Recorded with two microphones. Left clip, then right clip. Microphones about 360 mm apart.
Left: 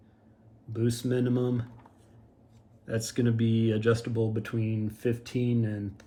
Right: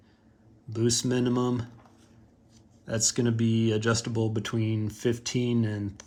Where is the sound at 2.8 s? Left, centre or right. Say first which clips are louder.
Right 3 dB; centre.